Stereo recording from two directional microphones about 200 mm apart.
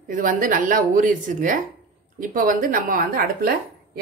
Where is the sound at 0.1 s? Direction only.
40° right (ahead or behind).